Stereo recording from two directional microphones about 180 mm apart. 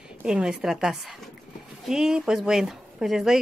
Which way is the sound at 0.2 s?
5° right (ahead or behind).